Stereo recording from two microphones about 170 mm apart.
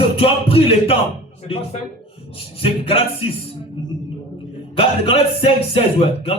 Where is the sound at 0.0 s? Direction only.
35° left (ahead or behind).